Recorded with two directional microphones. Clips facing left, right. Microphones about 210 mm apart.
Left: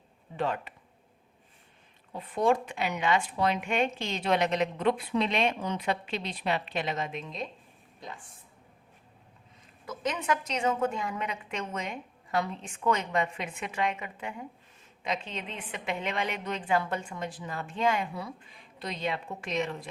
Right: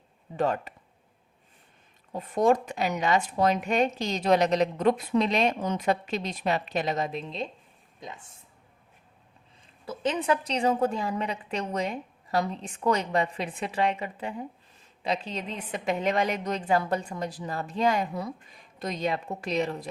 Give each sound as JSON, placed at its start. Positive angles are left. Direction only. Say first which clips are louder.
{"t": 0.3, "sound": "speech", "louder": "right 4 dB", "side_deg": -40}
{"t": 2.1, "sound": "speech", "louder": "right 3 dB", "side_deg": -45}
{"t": 9.8, "sound": "speech", "louder": "right 4 dB", "side_deg": -30}